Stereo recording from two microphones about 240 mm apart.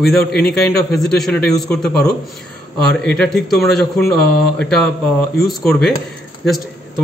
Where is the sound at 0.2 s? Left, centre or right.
Left.